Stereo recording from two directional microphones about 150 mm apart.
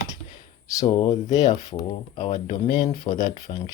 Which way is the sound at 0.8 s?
25° left (ahead or behind).